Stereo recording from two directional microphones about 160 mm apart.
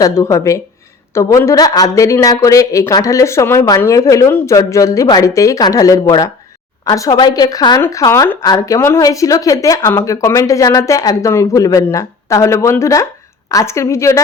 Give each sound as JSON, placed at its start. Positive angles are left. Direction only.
{"t": 0.0, "sound": "a woman's voice", "side_deg": 20}